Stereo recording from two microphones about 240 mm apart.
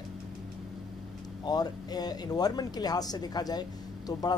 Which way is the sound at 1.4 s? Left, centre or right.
Centre.